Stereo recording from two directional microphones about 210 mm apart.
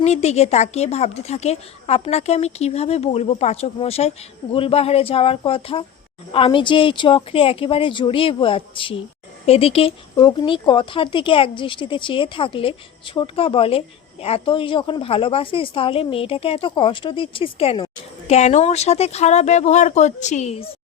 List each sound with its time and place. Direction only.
0.0 s speech: 30° left (ahead or behind)